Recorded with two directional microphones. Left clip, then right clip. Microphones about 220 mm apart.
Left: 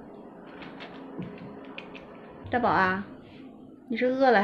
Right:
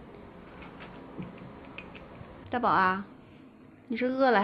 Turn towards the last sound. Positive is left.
turn(degrees=-20)  # may be behind; listen again after turning